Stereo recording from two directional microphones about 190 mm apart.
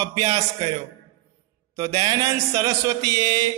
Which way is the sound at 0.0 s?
20° right (ahead or behind).